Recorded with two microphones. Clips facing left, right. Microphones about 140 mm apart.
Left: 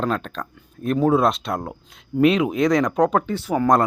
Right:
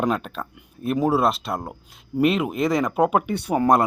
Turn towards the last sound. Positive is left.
turn(degrees=-30)  # may be behind; listen again after turning